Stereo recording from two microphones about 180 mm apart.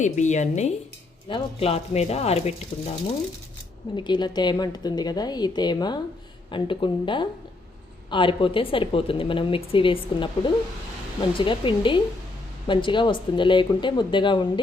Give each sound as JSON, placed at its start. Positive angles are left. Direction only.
{"t": 0.0, "sound": "speech", "side_deg": 40}
{"t": 3.9, "sound": "a woman's voice", "side_deg": 25}